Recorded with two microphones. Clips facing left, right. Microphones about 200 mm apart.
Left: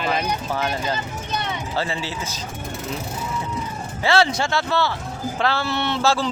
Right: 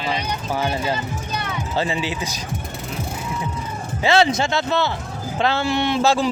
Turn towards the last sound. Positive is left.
turn(degrees=-15)  # may be behind; listen again after turning